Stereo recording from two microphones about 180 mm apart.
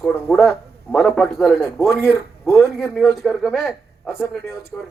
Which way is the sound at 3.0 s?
Centre (ahead or behind).